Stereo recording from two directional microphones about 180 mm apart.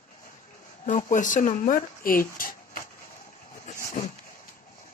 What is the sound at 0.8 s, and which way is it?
Speech, 45° left (ahead or behind).